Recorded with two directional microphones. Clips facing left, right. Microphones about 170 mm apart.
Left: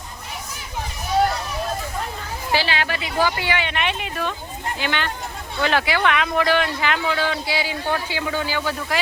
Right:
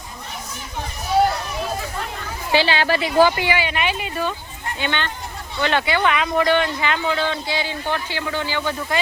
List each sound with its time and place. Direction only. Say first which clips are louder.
2.5 s a woman's voice: right 5 dB; 25° right (ahead or behind)
3.4 s speech: right 2 dB; 5° right (ahead or behind)